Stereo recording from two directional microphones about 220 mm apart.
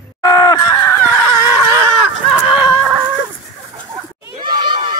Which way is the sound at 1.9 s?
5° right (ahead or behind).